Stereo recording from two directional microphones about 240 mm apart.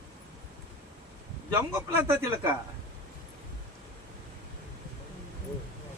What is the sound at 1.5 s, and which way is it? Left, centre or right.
Speech, centre.